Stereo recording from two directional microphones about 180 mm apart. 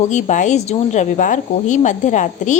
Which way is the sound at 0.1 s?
40° left (ahead or behind).